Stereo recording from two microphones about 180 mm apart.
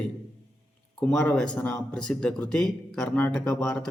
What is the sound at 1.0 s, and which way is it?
Speech, 5° left (ahead or behind).